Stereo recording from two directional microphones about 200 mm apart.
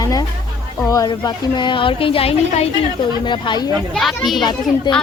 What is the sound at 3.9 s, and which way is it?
Speech, centre (ahead or behind).